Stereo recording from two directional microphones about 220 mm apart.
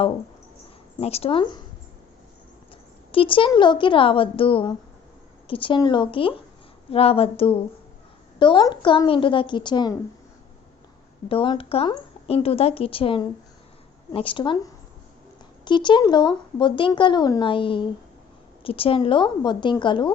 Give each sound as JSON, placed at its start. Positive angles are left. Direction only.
{"t": 0.9, "sound": "speech", "side_deg": 25}
{"t": 3.1, "sound": "speech", "side_deg": 25}
{"t": 11.3, "sound": "speech", "side_deg": 25}